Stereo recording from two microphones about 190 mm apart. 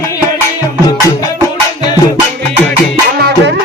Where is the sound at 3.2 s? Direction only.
60° right (ahead or behind).